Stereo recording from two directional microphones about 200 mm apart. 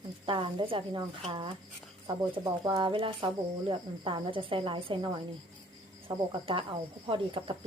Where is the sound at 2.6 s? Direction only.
25° right (ahead or behind).